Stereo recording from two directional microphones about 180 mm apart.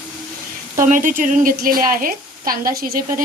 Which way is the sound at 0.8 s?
50° right (ahead or behind).